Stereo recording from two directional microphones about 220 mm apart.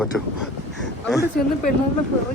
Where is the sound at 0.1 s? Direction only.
5° left (ahead or behind).